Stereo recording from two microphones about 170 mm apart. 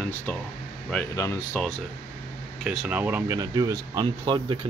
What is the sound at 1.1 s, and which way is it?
Speech, 15° left (ahead or behind).